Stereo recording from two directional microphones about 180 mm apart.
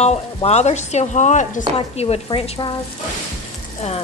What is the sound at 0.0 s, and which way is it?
Speech, 35° left (ahead or behind).